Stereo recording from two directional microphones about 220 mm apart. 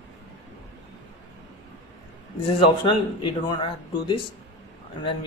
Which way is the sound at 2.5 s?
20° left (ahead or behind).